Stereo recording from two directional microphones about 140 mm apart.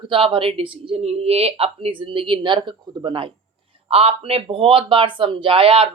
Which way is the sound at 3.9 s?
45° right (ahead or behind).